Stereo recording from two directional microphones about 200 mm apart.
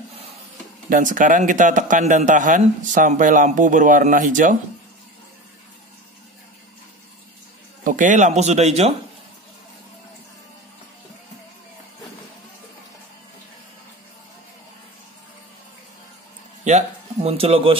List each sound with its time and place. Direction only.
0.8 s a man's voice: 40° right (ahead or behind)
7.8 s a man's voice: 40° right (ahead or behind)
16.6 s speech: 35° right (ahead or behind)